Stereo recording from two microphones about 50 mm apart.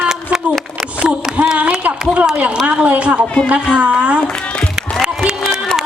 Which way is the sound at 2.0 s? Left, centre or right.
Centre.